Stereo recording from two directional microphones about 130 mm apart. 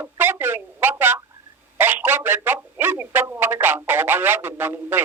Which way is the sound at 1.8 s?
15° right (ahead or behind).